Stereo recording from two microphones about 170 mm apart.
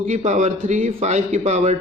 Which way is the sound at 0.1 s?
45° right (ahead or behind).